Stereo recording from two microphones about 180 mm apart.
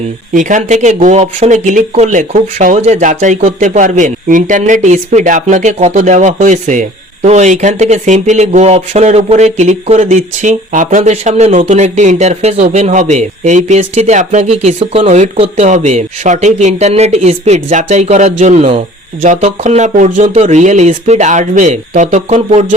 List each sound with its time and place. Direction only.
0.3 s speech: 45° right (ahead or behind)